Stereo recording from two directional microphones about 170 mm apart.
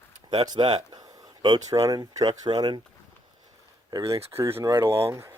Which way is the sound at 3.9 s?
20° right (ahead or behind).